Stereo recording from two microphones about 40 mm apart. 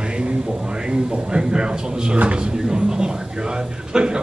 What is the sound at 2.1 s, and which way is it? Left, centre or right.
Speech, right.